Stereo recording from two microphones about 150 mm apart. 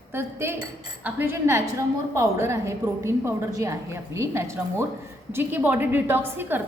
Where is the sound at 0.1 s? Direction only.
15° right (ahead or behind).